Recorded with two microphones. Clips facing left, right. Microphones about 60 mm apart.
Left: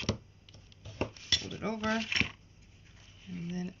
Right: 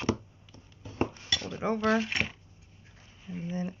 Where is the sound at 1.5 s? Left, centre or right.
Centre.